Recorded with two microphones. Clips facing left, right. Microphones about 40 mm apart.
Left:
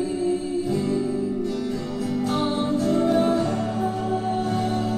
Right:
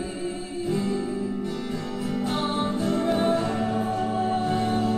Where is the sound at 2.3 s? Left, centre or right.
Centre.